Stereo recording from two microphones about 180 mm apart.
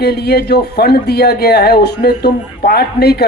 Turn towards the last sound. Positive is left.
turn(degrees=60)  # may be behind; listen again after turning